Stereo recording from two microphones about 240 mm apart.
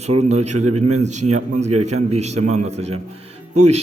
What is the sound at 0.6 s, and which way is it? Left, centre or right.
Speech, right.